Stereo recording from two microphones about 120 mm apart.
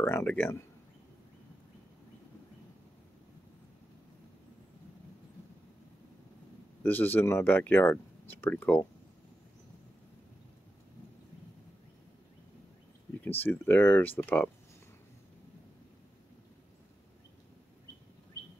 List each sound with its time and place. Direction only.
0.0 s speech: 15° left (ahead or behind)
6.8 s speech: 15° left (ahead or behind)
13.2 s speech: 15° left (ahead or behind)